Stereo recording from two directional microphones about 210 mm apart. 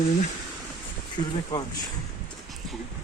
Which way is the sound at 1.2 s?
35° left (ahead or behind).